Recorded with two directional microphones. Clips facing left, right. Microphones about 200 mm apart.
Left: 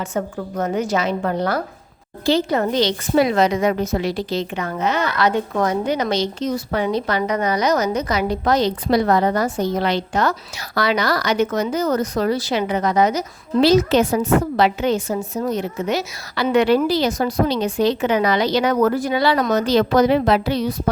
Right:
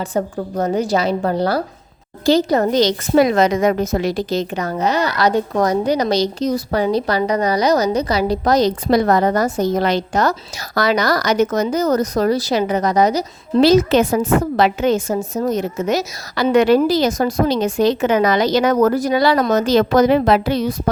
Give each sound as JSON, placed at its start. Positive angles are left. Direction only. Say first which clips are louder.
{"t": 0.0, "sound": "a woman's voice", "louder": "right 3 dB", "side_deg": -35}